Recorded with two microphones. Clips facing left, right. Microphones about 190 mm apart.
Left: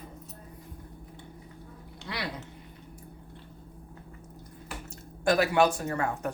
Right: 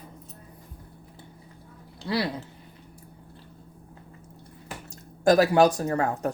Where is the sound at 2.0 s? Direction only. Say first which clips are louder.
Right 9 dB; 35° right (ahead or behind).